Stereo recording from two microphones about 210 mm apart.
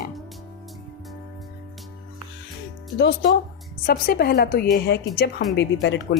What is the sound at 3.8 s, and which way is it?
A woman's voice, 45° left (ahead or behind).